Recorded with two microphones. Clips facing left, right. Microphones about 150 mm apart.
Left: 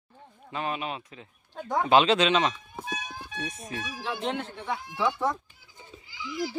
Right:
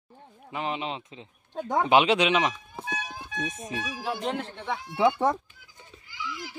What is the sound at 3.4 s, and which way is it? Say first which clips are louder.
Speech: right 3 dB; 20° right (ahead or behind).